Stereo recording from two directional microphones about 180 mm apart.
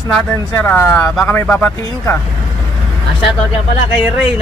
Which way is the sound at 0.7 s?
10° left (ahead or behind).